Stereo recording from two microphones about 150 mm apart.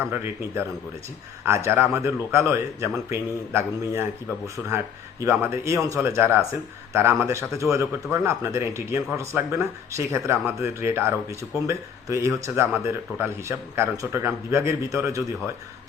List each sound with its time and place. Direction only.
1.5 s a man's voice: 20° right (ahead or behind)
5.2 s speech: 15° right (ahead or behind)